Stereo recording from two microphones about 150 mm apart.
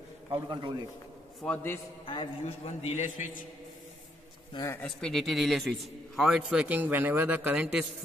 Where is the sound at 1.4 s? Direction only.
10° left (ahead or behind).